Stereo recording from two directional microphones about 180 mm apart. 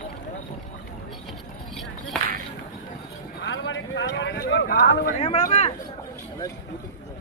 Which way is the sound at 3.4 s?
85° left.